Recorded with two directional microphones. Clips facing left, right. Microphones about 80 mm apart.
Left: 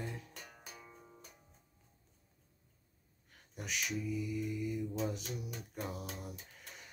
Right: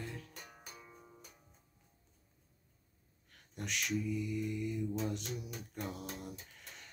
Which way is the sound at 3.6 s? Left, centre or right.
Centre.